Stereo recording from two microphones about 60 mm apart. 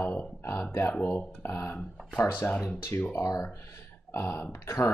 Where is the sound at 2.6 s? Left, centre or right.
Left.